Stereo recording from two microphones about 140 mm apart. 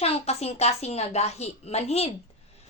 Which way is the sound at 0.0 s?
50° left (ahead or behind).